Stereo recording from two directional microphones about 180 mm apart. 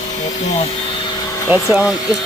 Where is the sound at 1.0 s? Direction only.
20° left (ahead or behind).